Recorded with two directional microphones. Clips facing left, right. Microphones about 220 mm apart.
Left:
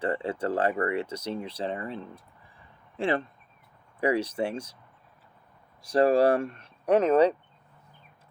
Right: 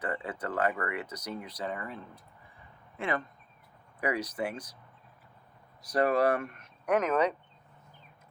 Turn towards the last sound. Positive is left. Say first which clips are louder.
# left 6 dB
turn(degrees=30)  # may be behind; listen again after turning